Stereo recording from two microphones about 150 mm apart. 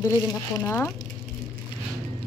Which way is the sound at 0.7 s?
15° left (ahead or behind).